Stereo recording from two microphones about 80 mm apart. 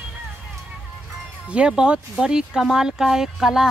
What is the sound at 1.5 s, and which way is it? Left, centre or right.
Speech, centre.